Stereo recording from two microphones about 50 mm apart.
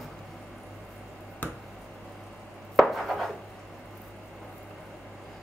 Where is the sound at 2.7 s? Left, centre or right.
Centre.